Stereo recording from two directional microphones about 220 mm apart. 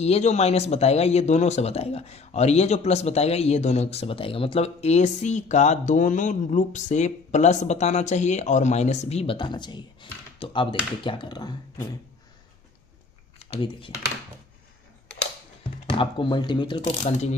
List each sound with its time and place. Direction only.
0.0 s speech: 30° left (ahead or behind)
13.5 s speech: 25° left (ahead or behind)
15.9 s speech: 20° left (ahead or behind)